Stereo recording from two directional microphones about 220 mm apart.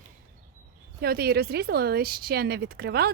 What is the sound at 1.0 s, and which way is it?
A woman's voice, 45° right (ahead or behind).